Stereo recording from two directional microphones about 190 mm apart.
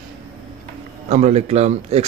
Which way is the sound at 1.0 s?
35° right (ahead or behind).